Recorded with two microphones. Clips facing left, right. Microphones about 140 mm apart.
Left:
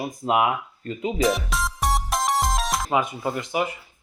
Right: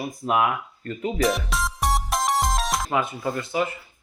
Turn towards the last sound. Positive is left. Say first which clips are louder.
# even
turn(degrees=15)  # may be behind; listen again after turning